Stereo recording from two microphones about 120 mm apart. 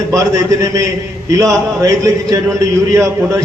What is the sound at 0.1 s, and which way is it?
A man's voice, 25° right (ahead or behind).